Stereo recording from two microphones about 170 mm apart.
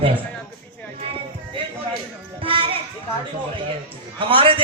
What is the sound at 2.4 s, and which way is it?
Children playing, 30° right (ahead or behind).